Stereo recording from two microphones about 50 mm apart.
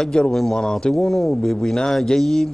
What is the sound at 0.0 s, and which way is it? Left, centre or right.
Speech, centre.